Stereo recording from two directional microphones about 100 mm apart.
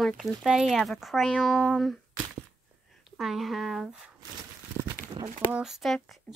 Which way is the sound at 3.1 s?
Centre (ahead or behind).